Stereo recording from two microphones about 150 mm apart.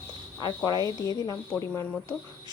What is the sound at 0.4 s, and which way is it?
Speech, 25° left (ahead or behind).